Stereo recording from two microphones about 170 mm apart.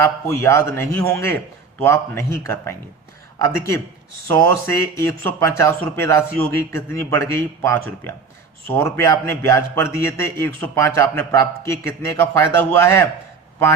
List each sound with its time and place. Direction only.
0.0 s speech: 15° left (ahead or behind)